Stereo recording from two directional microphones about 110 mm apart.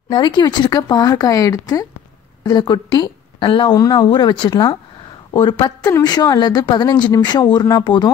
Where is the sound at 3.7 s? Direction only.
35° left (ahead or behind).